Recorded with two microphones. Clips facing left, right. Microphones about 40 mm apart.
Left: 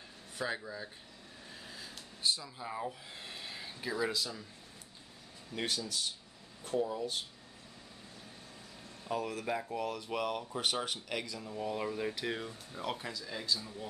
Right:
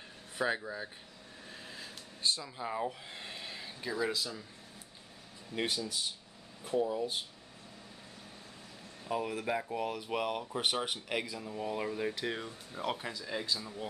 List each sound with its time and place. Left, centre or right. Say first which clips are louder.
0.4 s speech: right 4 dB; right
1.5 s vehicle: right 2 dB; centre
2.4 s speech: right 4 dB; centre
3.1 s a sound: right 1 dB; centre
5.5 s speech: right 2 dB; centre
9.0 s speech: right 2 dB; centre